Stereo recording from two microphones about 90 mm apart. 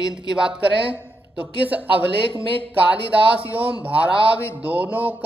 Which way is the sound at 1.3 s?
15° right (ahead or behind).